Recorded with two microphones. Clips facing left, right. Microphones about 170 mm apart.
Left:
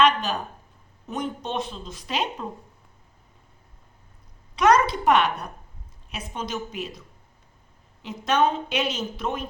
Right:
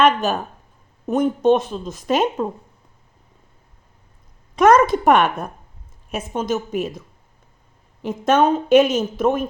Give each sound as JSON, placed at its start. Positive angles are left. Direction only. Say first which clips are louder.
{"t": 0.0, "sound": "a sound", "louder": "right 4 dB", "side_deg": -50}
{"t": 1.1, "sound": "a woman's voice", "louder": "right 13 dB", "side_deg": -50}
{"t": 4.5, "sound": "a woman's voice", "louder": "right 6 dB", "side_deg": -50}
{"t": 8.0, "sound": "a woman's voice", "louder": "right 6 dB", "side_deg": -50}